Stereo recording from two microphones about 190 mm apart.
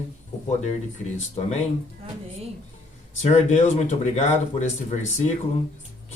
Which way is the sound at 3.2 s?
40° left (ahead or behind).